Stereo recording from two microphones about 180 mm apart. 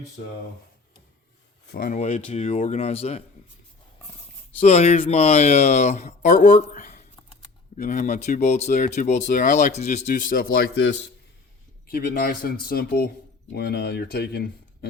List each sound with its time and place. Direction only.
1.6 s speech: 55° left (ahead or behind)
2.0 s speech: 40° left (ahead or behind)
4.6 s speech: 35° left (ahead or behind); by 14.8 s 60° left (ahead or behind)